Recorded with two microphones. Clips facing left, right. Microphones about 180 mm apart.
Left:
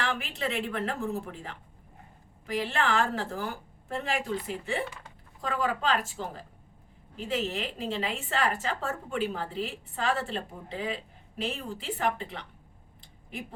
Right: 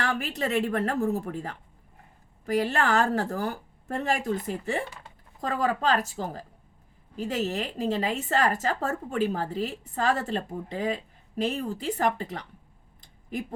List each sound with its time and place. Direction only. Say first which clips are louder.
0.0 s a woman's voice: right 3 dB; 40° right (ahead or behind)